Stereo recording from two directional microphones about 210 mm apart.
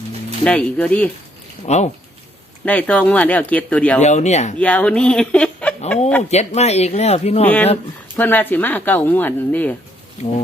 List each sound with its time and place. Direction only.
0.4 s speech: 5° left (ahead or behind)
1.6 s speech: 30° left (ahead or behind)
2.6 s speech: 5° left (ahead or behind)
4.0 s speech: 35° left (ahead or behind)
4.5 s speech: 5° left (ahead or behind)
6.3 s speech: 30° left (ahead or behind)
7.4 s speech: 10° left (ahead or behind)
10.2 s speech: 30° left (ahead or behind)